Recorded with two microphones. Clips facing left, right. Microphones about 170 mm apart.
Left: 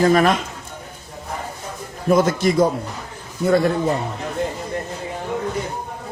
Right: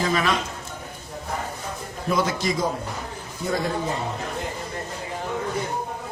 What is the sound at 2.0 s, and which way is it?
Speech, 50° left (ahead or behind).